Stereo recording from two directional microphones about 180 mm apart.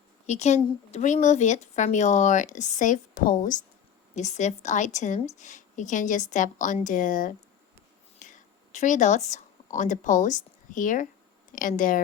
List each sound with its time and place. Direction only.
0.3 s a woman's voice: 40° left (ahead or behind)